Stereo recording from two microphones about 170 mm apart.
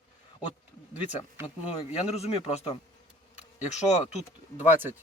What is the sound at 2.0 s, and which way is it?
Speech, 40° left (ahead or behind).